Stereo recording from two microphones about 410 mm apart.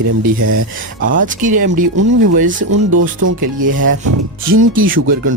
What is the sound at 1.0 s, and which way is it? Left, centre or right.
Speech, centre.